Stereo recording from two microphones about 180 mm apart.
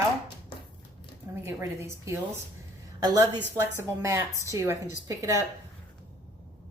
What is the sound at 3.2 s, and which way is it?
Speech, 10° left (ahead or behind).